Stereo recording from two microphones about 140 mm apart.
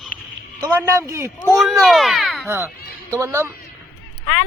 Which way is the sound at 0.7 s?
20° right (ahead or behind).